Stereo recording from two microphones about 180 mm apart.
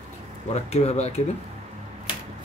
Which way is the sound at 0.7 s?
35° left (ahead or behind).